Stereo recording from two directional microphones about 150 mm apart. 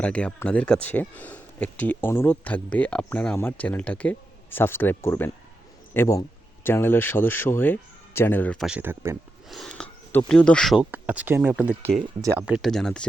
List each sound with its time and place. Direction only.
0.0 s speech: 10° left (ahead or behind)
8.5 s speech: 5° right (ahead or behind)
8.8 s speech: 15° right (ahead or behind)
9.5 s speech: centre (ahead or behind)
10.8 s speech: 10° right (ahead or behind)
12.6 s speech: 5° left (ahead or behind)